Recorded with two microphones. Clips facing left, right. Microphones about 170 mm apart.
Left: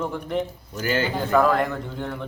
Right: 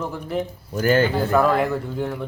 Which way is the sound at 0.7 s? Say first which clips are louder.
Right 6 dB; 50° right (ahead or behind).